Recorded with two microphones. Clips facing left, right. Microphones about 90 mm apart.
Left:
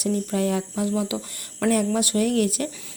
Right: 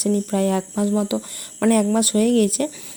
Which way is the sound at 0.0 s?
40° right (ahead or behind).